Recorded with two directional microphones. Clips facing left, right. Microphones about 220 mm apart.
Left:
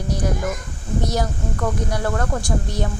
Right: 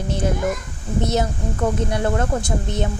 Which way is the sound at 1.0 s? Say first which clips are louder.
Right 3 dB; 25° right (ahead or behind).